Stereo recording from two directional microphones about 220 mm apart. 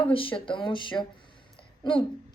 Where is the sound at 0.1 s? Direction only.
25° left (ahead or behind).